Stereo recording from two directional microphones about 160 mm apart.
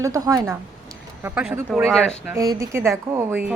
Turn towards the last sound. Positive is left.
turn(degrees=-15)  # may be behind; listen again after turning